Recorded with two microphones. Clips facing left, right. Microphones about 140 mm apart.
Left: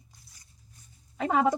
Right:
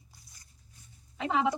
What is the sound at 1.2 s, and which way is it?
Speech, 45° left (ahead or behind).